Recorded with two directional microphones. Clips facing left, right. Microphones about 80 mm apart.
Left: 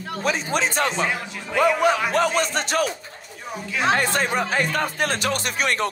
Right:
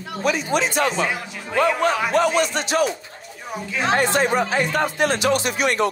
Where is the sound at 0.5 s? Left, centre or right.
Left.